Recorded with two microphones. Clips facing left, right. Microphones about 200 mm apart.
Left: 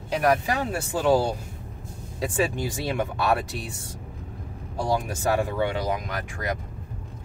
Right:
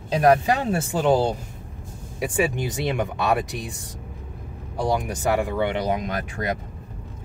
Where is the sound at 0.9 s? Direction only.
20° right (ahead or behind).